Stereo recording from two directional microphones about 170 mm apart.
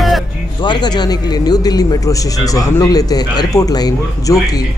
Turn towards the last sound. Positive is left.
turn(degrees=20)  # may be behind; listen again after turning